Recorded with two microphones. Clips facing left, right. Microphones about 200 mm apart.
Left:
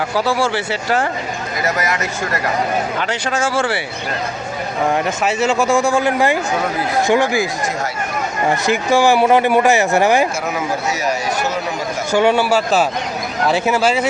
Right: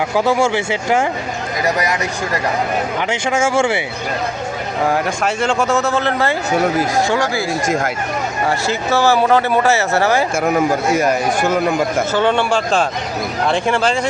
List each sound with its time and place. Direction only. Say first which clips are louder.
1.6 s speech: right 2 dB; 15° right (ahead or behind)
4.9 s speech: even; centre (ahead or behind); by 7.4 s 15° left (ahead or behind)
8.4 s speech: left 3 dB; 15° left (ahead or behind)
10.3 s speech: right 6 dB; 50° right (ahead or behind)
12.1 s speech: left 5 dB; 10° left (ahead or behind)